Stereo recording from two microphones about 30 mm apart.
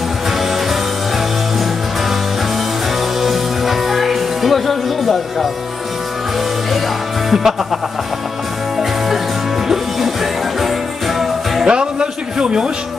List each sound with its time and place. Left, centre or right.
3.2 s music: centre
7.2 s music: centre
9.7 s music: centre
11.6 s music: right